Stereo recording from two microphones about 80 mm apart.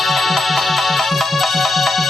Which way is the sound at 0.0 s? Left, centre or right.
Centre.